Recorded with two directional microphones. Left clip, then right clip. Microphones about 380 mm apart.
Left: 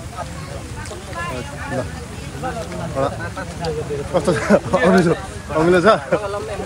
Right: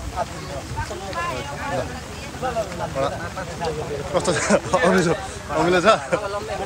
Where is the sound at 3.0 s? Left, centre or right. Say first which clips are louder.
Left 3 dB; centre.